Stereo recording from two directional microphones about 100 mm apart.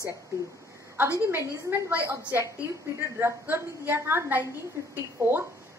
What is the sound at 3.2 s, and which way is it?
A woman's voice, 25° right (ahead or behind).